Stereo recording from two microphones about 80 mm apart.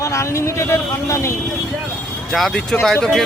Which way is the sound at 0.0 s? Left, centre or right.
Left.